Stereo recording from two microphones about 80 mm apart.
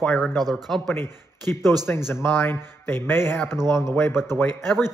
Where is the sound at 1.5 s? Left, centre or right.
Centre.